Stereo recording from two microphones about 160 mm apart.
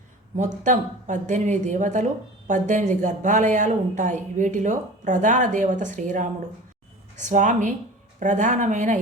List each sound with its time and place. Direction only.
0.6 s speech: 50° right (ahead or behind)